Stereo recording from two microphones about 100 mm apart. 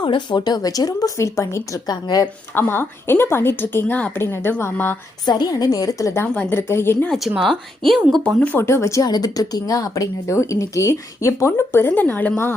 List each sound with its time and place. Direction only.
0.0 s speech: 50° left (ahead or behind)
2.6 s a woman's voice: 20° left (ahead or behind)
5.2 s speech: 45° left (ahead or behind)
6.2 s a woman's voice: 15° left (ahead or behind)
6.6 s a woman's voice: 25° left (ahead or behind)
7.1 s speech: centre (ahead or behind)
8.4 s a woman's voice: 20° left (ahead or behind)
9.0 s speech: 40° left (ahead or behind); by 12.3 s 15° left (ahead or behind)